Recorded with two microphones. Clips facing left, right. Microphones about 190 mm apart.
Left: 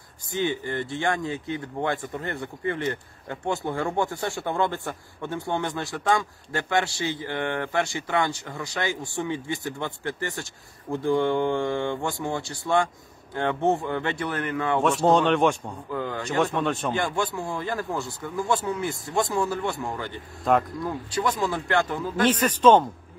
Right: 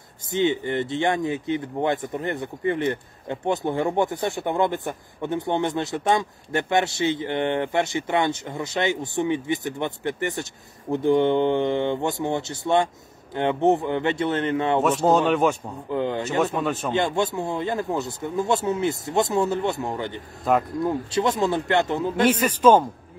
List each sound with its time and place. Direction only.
0.3 s speech: 20° right (ahead or behind)
15.0 s speech: 5° right (ahead or behind)
15.9 s speech: 20° right (ahead or behind)
16.5 s speech: 5° right (ahead or behind)
16.9 s speech: 25° right (ahead or behind)
20.5 s speech: 5° right (ahead or behind)
20.8 s speech: 25° right (ahead or behind)
22.2 s speech: 10° right (ahead or behind)